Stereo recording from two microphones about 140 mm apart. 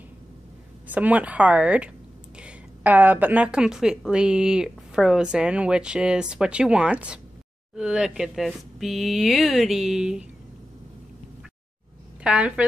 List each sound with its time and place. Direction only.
0.8 s a woman's voice: 10° right (ahead or behind)
12.2 s speech: 10° right (ahead or behind)